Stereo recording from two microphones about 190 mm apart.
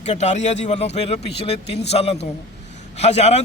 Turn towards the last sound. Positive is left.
turn(degrees=35)  # may be behind; listen again after turning